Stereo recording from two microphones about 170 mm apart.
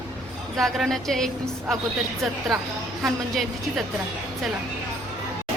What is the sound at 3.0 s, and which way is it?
Speech, centre (ahead or behind).